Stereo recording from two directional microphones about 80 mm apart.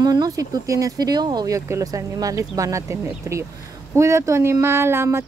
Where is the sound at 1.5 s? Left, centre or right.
Right.